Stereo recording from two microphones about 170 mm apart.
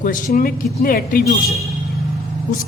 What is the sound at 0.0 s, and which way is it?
A man's voice, 55° left (ahead or behind).